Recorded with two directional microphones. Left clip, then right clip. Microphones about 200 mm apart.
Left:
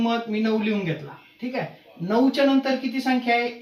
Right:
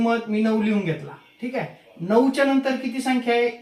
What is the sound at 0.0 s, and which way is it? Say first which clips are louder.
Speech: right 2 dB; 15° right (ahead or behind).